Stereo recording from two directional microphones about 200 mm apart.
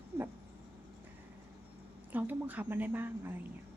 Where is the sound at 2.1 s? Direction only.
10° right (ahead or behind).